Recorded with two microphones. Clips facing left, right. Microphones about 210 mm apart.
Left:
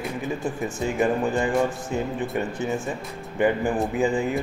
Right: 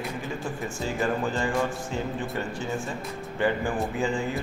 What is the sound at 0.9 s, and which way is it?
A man's voice, 20° left (ahead or behind).